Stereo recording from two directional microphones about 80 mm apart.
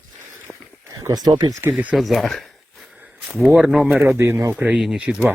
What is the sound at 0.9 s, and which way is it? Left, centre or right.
Speech, right.